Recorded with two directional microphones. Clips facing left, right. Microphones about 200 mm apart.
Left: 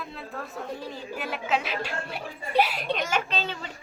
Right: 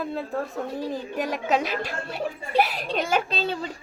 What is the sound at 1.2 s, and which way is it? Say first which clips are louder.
Speech: right 4 dB; 40° right (ahead or behind).